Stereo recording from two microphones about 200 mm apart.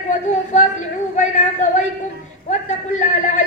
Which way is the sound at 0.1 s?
35° left (ahead or behind).